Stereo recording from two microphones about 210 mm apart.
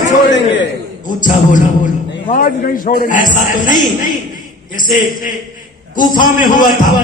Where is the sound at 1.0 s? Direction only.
40° left (ahead or behind).